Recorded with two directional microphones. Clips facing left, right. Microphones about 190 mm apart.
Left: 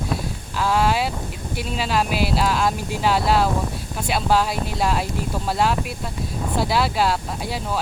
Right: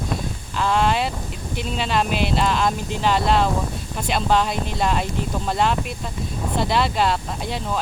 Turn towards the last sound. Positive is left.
turn(degrees=5)  # may be behind; listen again after turning